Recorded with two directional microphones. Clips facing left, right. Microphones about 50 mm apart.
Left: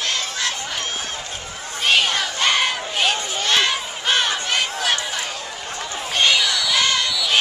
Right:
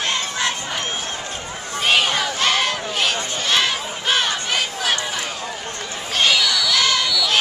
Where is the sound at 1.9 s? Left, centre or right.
Centre.